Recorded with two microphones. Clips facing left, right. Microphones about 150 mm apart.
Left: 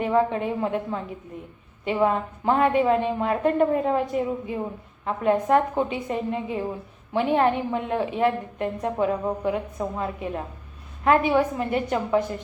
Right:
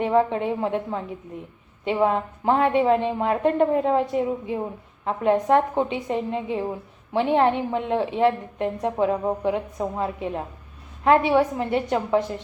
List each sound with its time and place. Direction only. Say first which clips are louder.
0.0 s a woman's voice: right 1 dB; 20° right (ahead or behind)